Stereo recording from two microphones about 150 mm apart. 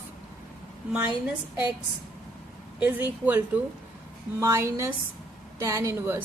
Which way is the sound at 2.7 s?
10° right (ahead or behind).